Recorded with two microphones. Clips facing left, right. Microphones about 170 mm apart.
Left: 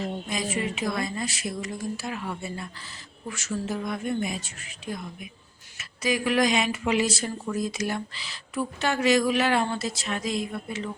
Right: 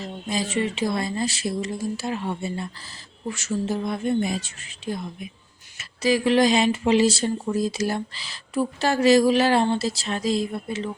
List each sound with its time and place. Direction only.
0.3 s speech: 30° right (ahead or behind)